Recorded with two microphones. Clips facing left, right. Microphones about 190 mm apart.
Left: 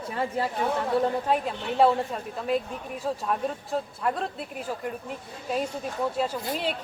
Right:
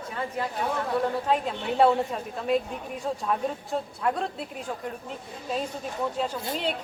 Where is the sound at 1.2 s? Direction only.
5° left (ahead or behind).